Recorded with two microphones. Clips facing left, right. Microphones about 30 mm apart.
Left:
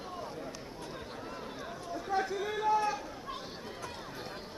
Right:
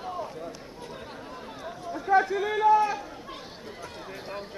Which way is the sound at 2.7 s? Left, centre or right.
Centre.